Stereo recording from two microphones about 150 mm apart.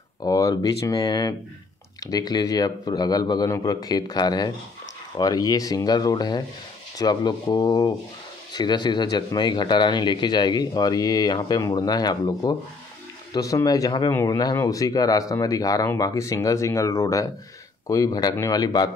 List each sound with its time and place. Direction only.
0.2 s speech: 25° left (ahead or behind)